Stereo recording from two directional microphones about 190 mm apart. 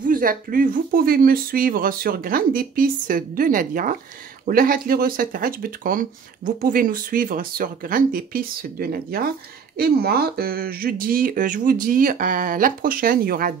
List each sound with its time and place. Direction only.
0.0 s speech: 45° right (ahead or behind)